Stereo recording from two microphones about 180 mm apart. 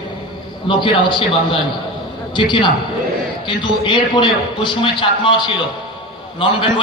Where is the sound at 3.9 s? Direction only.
25° left (ahead or behind).